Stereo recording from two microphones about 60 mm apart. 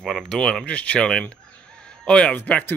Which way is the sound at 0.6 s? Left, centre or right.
Left.